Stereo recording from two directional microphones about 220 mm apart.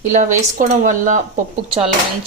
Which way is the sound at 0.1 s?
35° right (ahead or behind).